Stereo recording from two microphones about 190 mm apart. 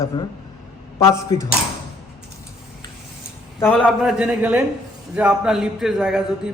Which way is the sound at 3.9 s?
5° right (ahead or behind).